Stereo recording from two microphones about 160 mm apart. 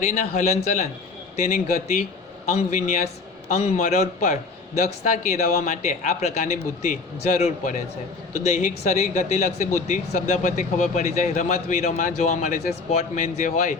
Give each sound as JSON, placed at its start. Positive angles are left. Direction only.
{"t": 0.0, "sound": "speech", "side_deg": 50}